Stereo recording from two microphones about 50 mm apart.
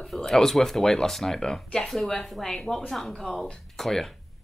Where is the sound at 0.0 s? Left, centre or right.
Centre.